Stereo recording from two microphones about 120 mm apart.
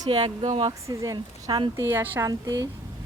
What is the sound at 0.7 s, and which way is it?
Speech, 30° right (ahead or behind).